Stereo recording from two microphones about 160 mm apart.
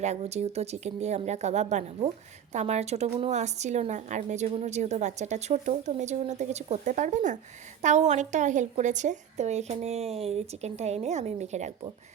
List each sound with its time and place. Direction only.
0.0 s speech: 45° right (ahead or behind)